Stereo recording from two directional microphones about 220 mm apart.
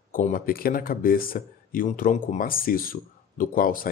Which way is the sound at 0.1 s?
40° left (ahead or behind).